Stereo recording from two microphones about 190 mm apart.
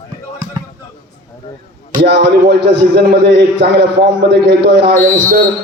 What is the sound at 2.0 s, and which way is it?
A man's voice, 65° right (ahead or behind).